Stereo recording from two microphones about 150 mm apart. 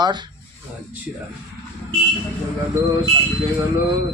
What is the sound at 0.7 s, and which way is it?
Speech, 10° right (ahead or behind).